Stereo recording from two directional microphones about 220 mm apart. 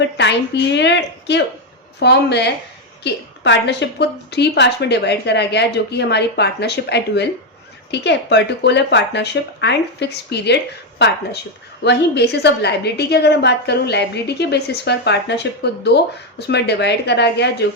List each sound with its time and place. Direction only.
0.0 s a woman's voice: 50° left (ahead or behind)